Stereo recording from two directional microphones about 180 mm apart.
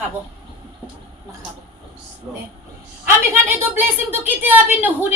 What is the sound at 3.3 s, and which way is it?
Speech, 10° right (ahead or behind).